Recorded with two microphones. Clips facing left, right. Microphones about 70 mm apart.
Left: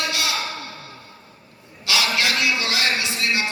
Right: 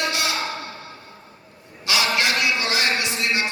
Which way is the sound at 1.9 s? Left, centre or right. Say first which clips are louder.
Right 1 dB; right.